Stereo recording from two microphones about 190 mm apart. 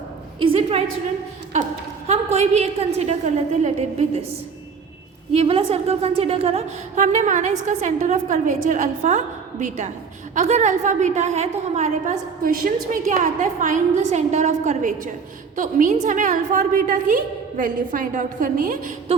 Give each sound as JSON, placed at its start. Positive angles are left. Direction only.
{"t": 0.3, "sound": "a sound", "side_deg": -30}
{"t": 2.0, "sound": "a woman's voice", "side_deg": -35}
{"t": 5.3, "sound": "a woman's voice", "side_deg": -30}